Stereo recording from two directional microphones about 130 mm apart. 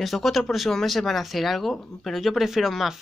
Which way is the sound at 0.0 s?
Centre (ahead or behind).